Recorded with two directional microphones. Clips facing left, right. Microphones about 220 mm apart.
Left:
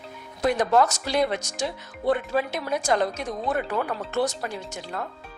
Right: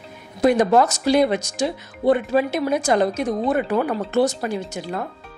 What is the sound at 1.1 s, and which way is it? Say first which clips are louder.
Speech: right 7 dB; 10° right (ahead or behind).